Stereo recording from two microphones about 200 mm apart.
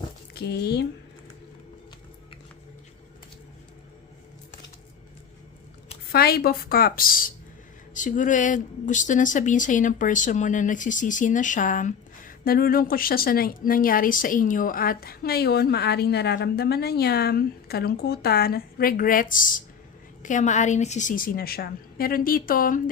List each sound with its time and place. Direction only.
0.3 s speech: 55° left (ahead or behind)
6.1 s speech: 50° left (ahead or behind)